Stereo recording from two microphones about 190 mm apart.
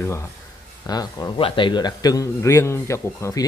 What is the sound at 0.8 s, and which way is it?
A man's voice, 20° left (ahead or behind).